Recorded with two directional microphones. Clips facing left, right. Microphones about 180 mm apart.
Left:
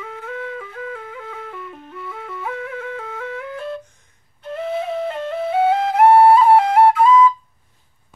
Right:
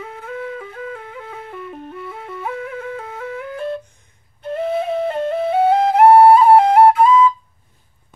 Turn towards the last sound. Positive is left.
turn(degrees=-30)  # may be behind; listen again after turning